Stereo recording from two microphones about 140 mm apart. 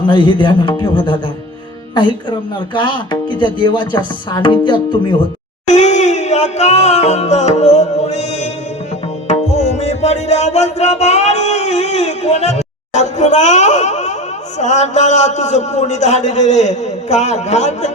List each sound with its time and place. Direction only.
0.1 s speech: 35° left (ahead or behind)
2.7 s speech: 35° left (ahead or behind)
5.6 s music: 55° left (ahead or behind)
14.6 s a man's voice: 55° left (ahead or behind)